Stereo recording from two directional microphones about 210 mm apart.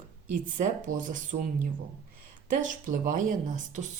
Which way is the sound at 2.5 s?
40° right (ahead or behind).